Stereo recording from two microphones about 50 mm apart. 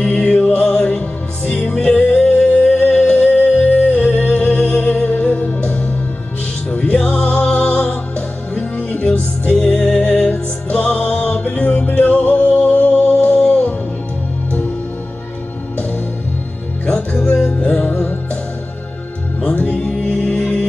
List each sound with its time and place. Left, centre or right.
0.1 s music: left
7.1 s music: left
9.6 s music: centre
10.3 s music: left
16.8 s music: left
17.9 s music: left
19.4 s music: left